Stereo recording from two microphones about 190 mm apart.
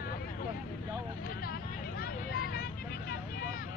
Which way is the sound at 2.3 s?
50° left (ahead or behind).